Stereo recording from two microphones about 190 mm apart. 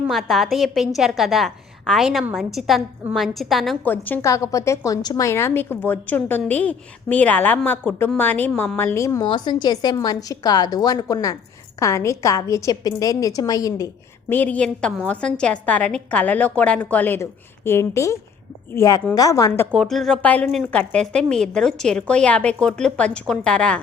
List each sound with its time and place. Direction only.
0.1 s a woman's voice: centre (ahead or behind); by 19.6 s 15° left (ahead or behind)
19.7 s a woman's voice: centre (ahead or behind)